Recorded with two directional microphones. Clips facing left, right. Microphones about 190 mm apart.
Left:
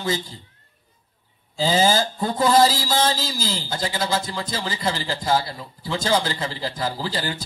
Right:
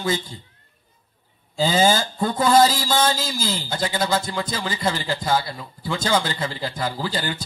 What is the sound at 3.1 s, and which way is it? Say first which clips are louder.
Speech: right 1 dB; 55° right (ahead or behind).